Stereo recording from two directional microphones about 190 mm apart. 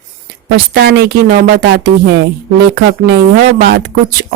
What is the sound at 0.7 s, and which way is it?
Speech, 55° right (ahead or behind).